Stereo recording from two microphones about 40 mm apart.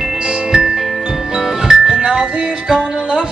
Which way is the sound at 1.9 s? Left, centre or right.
Right.